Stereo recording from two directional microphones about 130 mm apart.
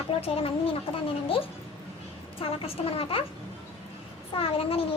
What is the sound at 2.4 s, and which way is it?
Speech, 45° left (ahead or behind).